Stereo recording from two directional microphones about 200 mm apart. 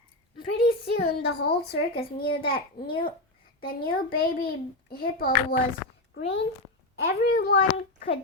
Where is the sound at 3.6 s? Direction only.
45° left (ahead or behind).